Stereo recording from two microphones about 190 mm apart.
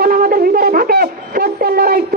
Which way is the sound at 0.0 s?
50° right (ahead or behind).